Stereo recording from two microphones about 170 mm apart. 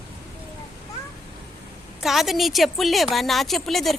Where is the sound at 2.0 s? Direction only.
Centre (ahead or behind).